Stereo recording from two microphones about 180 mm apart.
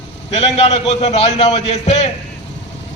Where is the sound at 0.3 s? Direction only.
35° left (ahead or behind).